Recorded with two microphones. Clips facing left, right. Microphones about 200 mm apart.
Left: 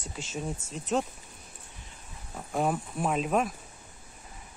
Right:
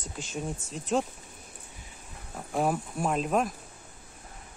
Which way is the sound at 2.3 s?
Centre (ahead or behind).